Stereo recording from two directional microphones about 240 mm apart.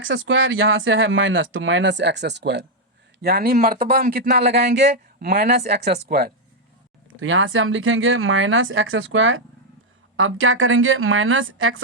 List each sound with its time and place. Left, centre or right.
0.1 s speech: right
7.2 s speech: right